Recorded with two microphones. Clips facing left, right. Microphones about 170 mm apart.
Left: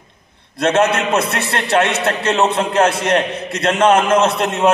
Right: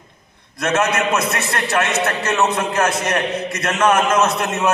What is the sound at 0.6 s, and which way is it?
A man's voice, 30° left (ahead or behind).